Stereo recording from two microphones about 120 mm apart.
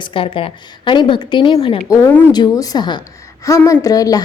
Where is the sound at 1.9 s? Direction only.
20° left (ahead or behind).